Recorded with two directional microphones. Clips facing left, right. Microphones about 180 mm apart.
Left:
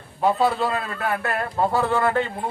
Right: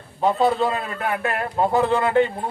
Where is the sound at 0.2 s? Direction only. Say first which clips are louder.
Right 1 dB; 20° right (ahead or behind).